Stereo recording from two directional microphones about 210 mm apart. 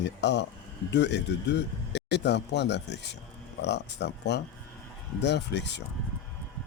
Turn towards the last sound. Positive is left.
turn(degrees=55)  # may be behind; listen again after turning